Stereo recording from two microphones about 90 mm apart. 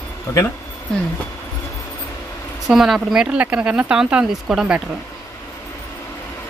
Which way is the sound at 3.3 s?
15° right (ahead or behind).